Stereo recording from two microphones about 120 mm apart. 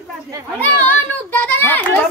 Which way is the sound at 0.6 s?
15° left (ahead or behind).